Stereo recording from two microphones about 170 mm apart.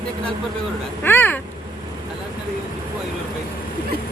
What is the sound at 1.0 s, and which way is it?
Speech, 10° left (ahead or behind).